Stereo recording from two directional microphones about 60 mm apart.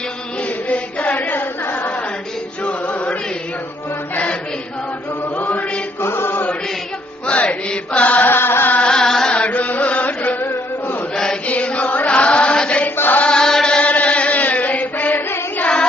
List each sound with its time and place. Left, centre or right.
0.7 s chant: left
2.6 s music: left
4.1 s chant: left
5.4 s mantra: left
6.0 s mantra: left
7.3 s chant: centre; by 8.8 s left
8.8 s carnatic music: centre
9.3 s chant: left
11.1 s mantra: centre
11.4 s chant: left
13.0 s chant: left
13.2 s chant: centre; by 15.7 s left